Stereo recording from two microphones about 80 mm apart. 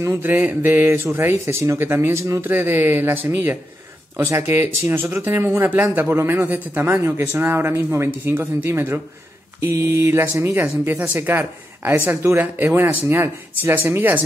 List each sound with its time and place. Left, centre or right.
0.0 s speech: right
2.4 s a man's voice: right